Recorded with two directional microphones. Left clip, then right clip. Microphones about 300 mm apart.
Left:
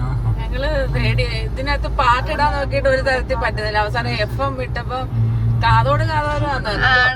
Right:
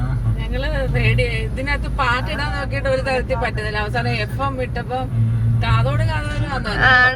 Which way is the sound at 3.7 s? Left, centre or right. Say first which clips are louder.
Left 3 dB; left.